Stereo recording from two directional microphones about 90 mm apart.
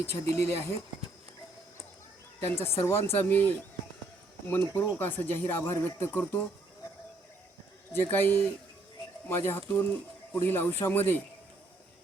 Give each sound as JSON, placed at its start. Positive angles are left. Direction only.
{"t": 0.0, "sound": "speech", "side_deg": 30}
{"t": 2.6, "sound": "speech", "side_deg": 30}
{"t": 8.0, "sound": "speech", "side_deg": 25}